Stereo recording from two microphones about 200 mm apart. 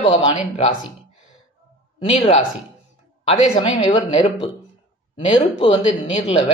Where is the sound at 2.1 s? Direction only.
30° left (ahead or behind).